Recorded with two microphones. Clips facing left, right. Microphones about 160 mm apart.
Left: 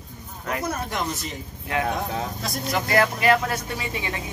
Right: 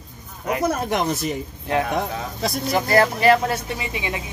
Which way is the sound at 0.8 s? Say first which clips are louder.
Right 6 dB; 70° right (ahead or behind).